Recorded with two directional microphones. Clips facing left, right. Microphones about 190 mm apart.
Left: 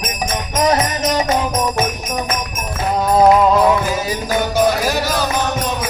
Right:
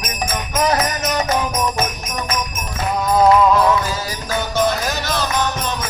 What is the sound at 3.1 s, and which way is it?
Music, 20° left (ahead or behind).